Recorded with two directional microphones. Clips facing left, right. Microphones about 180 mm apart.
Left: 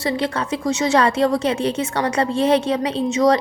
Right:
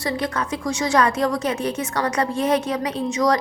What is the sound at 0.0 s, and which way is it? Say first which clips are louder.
A woman's voice: left 3 dB; 25° left (ahead or behind).